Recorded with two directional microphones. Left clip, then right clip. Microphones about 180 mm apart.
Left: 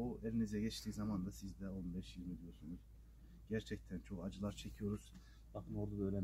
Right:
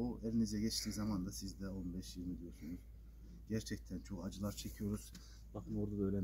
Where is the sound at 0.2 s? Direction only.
20° left (ahead or behind).